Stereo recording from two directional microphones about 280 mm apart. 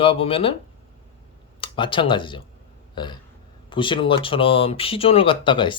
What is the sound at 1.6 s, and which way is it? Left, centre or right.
Speech, centre.